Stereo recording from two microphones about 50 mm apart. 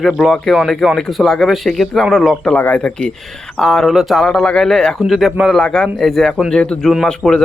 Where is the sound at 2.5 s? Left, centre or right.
Left.